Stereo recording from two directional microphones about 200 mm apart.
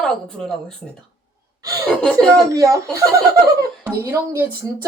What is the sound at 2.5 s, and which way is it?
Speech, 15° right (ahead or behind).